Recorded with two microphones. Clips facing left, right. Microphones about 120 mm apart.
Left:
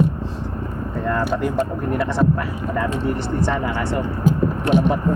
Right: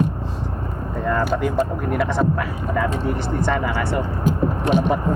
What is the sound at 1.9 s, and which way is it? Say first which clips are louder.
Speech: even; centre (ahead or behind).